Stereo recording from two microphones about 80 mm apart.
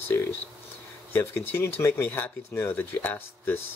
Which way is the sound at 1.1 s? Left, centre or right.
Left.